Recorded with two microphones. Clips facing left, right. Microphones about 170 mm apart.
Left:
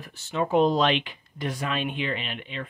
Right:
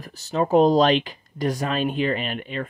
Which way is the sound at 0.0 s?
40° right (ahead or behind).